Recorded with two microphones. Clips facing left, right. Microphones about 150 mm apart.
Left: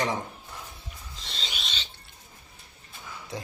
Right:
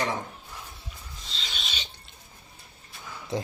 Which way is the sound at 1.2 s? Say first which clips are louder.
Left 2 dB; 90° left.